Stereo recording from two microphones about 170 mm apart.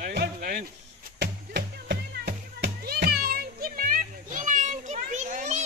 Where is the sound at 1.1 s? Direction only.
75° right (ahead or behind); by 5.6 s 45° right (ahead or behind).